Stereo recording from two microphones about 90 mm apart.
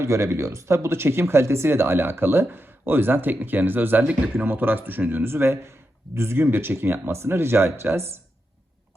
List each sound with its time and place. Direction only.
0.0 s speech: 30° right (ahead or behind)